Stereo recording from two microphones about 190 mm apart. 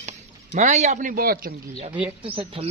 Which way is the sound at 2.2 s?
30° right (ahead or behind).